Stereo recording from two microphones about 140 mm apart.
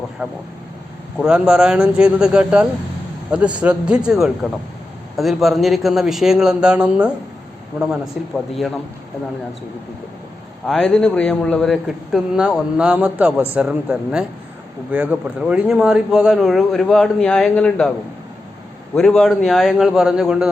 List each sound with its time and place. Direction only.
0.2 s a man's voice: 5° right (ahead or behind)
10.7 s a man's voice: 5° left (ahead or behind)
18.9 s a man's voice: 5° left (ahead or behind)